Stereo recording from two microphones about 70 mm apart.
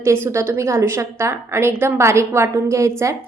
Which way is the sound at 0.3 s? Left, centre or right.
Right.